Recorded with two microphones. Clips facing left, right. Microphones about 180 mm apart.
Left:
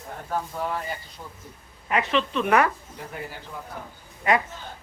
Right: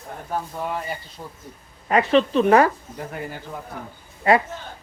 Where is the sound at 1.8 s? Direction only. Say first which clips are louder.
Right 7 dB; 40° right (ahead or behind).